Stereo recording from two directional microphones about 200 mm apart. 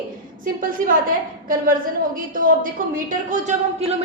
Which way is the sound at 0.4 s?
45° right (ahead or behind).